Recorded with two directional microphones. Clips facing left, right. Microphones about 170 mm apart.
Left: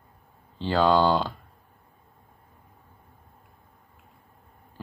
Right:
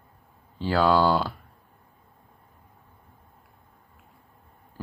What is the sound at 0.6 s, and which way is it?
Speech, 10° right (ahead or behind).